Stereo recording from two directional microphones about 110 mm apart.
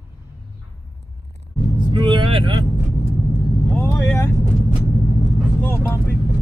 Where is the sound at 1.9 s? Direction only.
45° right (ahead or behind).